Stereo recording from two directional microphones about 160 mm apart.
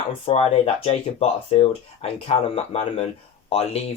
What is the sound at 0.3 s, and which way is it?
Speech, 40° left (ahead or behind).